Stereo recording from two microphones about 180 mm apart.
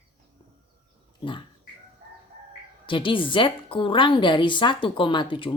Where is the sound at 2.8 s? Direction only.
30° left (ahead or behind).